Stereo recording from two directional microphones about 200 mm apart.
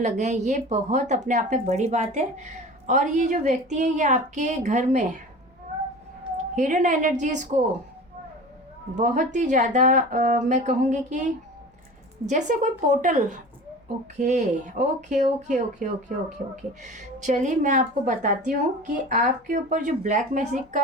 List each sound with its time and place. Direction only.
0.0 s speech: 35° right (ahead or behind)
6.3 s speech: 35° right (ahead or behind)
9.0 s speech: 40° right (ahead or behind)